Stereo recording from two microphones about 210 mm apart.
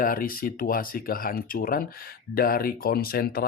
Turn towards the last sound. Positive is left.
turn(degrees=45)  # may be behind; listen again after turning